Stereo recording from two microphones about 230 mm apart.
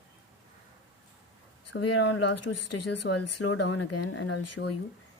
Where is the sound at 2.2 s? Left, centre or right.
Left.